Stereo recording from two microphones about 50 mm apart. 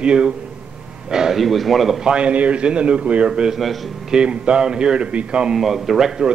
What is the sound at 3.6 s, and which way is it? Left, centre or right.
Speech, centre.